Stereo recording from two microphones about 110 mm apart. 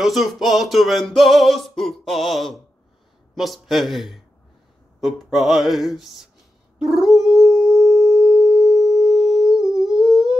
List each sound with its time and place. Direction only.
0.0 s a sound: centre (ahead or behind)
6.8 s howl: centre (ahead or behind)
9.8 s humming: 5° right (ahead or behind)